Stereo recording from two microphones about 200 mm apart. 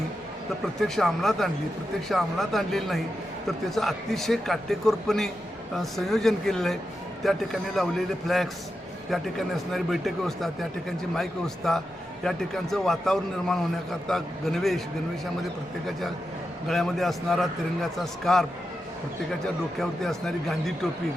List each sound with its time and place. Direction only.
0.6 s a man's voice: centre (ahead or behind)
15.9 s speech: centre (ahead or behind)
19.8 s speech: centre (ahead or behind)